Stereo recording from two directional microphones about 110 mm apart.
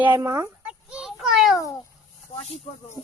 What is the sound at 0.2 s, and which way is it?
Speech, 25° right (ahead or behind).